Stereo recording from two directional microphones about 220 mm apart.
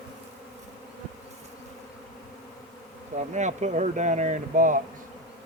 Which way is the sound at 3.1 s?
30° right (ahead or behind).